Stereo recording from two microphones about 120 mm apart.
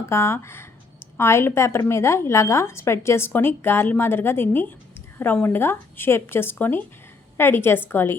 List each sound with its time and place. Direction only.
0.1 s a woman's voice: 20° left (ahead or behind)